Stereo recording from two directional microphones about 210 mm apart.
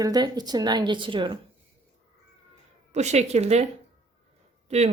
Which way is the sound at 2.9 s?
35° right (ahead or behind).